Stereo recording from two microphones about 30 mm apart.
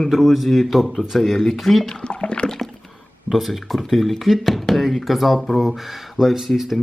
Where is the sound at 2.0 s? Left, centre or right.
Left.